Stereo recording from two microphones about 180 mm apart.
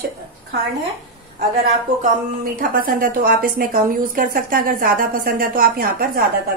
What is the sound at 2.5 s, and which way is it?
A woman's voice, 50° right (ahead or behind).